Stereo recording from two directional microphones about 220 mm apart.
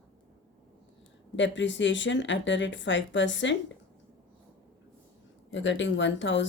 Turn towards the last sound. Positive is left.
turn(degrees=55)  # may be behind; listen again after turning